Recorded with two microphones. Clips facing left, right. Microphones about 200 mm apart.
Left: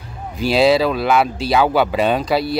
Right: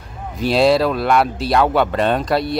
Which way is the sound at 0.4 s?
Centre (ahead or behind).